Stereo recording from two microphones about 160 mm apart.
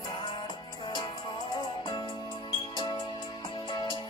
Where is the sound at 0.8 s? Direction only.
30° left (ahead or behind).